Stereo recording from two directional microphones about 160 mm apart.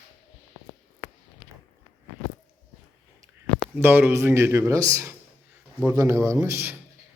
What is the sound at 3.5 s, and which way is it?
Speech, 10° right (ahead or behind).